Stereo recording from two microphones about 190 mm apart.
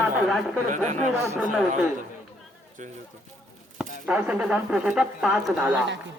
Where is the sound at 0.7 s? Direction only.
40° right (ahead or behind).